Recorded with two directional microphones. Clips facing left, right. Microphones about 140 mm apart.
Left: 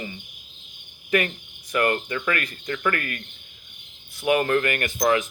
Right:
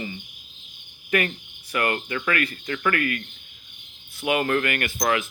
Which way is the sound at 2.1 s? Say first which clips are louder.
Right 1 dB; 35° left (ahead or behind).